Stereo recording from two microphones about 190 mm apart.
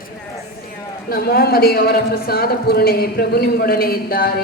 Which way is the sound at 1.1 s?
55° left (ahead or behind).